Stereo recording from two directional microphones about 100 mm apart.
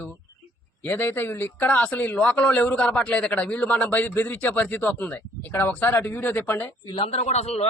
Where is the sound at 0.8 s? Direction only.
20° left (ahead or behind).